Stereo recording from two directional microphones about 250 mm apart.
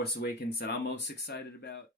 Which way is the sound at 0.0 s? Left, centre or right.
Left.